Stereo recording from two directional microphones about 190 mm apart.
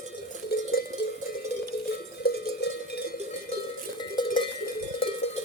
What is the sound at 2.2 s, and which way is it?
Cowbell, 55° left (ahead or behind).